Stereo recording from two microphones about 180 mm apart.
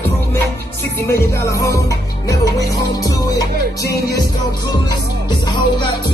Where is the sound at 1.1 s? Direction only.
15° left (ahead or behind).